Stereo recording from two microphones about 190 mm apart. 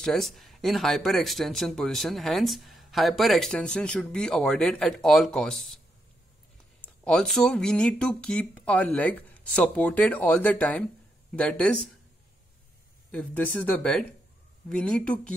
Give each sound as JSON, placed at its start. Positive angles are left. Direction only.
{"t": 0.0, "sound": "speech", "side_deg": 0}
{"t": 6.8, "sound": "speech", "side_deg": 5}
{"t": 13.1, "sound": "speech", "side_deg": 10}